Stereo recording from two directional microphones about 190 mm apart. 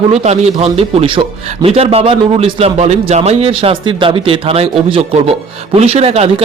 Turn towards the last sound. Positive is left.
turn(degrees=-35)  # may be behind; listen again after turning